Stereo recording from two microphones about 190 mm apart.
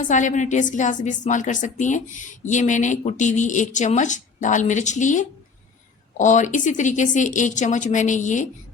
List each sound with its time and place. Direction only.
0.0 s a woman's voice: 40° left (ahead or behind)